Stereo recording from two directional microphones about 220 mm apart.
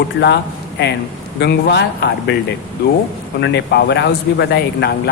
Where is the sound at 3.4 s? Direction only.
50° left (ahead or behind).